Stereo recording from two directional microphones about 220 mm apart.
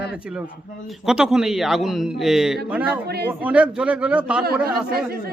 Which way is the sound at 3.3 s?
5° right (ahead or behind).